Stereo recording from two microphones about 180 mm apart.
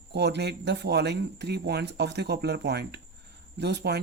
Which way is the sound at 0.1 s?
70° right (ahead or behind).